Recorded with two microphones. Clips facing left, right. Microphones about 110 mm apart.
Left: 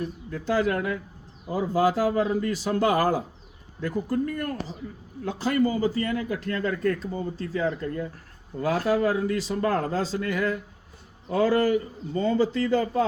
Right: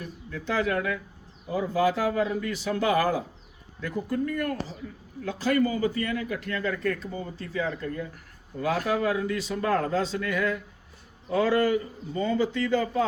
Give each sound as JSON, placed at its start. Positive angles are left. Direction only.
{"t": 0.0, "sound": "a man's voice", "side_deg": 35}